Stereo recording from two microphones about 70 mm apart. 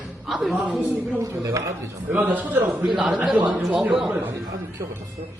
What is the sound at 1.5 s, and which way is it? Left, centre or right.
Speech, right.